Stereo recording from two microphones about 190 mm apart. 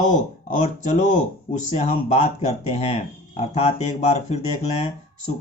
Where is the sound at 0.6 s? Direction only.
40° left (ahead or behind).